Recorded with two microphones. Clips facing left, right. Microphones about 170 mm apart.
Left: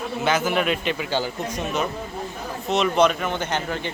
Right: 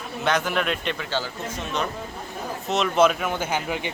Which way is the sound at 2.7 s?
Centre (ahead or behind).